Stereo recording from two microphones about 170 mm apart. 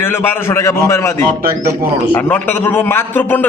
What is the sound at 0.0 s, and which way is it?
A man's voice, 15° left (ahead or behind).